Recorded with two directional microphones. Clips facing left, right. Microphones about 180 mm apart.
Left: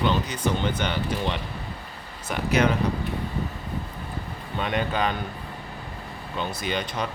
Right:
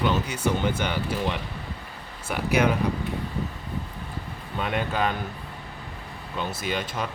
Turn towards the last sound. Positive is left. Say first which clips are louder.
# left 1 dB
turn(degrees=-5)  # may be behind; listen again after turning